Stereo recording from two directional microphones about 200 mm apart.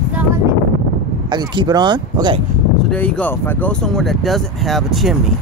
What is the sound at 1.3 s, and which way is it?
Speech, 20° right (ahead or behind).